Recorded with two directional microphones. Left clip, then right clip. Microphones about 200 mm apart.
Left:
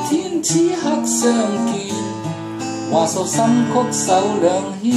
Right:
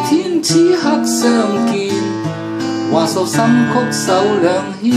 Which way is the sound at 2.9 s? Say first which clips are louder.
Right 2 dB; 15° right (ahead or behind).